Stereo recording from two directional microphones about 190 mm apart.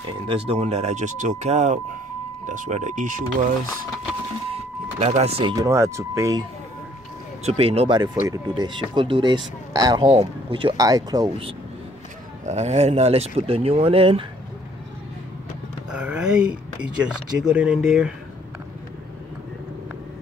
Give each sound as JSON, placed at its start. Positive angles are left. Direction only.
{"t": 0.3, "sound": "speech", "side_deg": -30}
{"t": 4.9, "sound": "speech", "side_deg": -30}
{"t": 7.4, "sound": "speech", "side_deg": -30}
{"t": 12.4, "sound": "speech", "side_deg": -35}
{"t": 15.9, "sound": "a sound", "side_deg": -5}
{"t": 17.0, "sound": "speech", "side_deg": -5}